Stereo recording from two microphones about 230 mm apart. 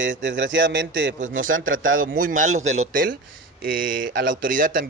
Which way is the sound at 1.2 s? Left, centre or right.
Right.